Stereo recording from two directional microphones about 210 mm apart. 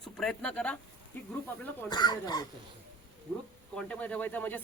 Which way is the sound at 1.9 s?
20° left (ahead or behind).